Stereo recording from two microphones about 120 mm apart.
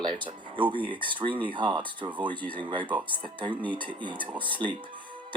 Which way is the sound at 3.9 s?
45° right (ahead or behind).